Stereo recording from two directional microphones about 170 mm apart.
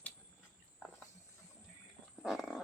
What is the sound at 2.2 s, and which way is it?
Wild animals, centre (ahead or behind).